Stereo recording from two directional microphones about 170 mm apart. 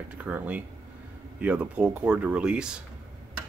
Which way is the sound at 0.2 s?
10° right (ahead or behind).